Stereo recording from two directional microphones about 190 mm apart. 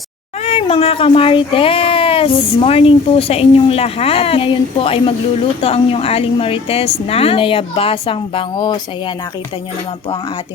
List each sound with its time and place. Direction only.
0.4 s speech: 30° left (ahead or behind)